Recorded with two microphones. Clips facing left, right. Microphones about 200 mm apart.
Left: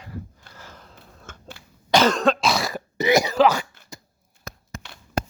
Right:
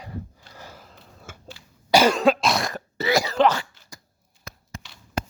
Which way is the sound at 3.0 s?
15° left (ahead or behind).